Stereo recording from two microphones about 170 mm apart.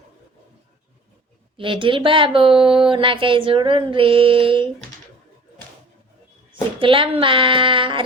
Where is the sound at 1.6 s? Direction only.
30° right (ahead or behind).